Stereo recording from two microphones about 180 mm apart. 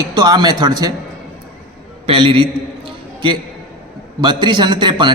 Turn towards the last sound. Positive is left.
turn(degrees=-25)  # may be behind; listen again after turning